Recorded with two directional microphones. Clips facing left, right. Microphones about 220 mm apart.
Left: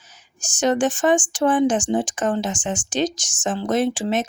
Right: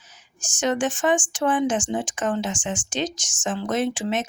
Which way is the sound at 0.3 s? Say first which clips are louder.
Left 4 dB; 35° left (ahead or behind).